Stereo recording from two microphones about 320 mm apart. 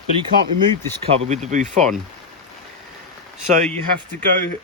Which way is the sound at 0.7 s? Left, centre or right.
Centre.